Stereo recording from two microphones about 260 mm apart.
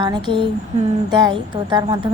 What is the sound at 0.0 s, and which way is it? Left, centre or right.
A woman's voice, centre.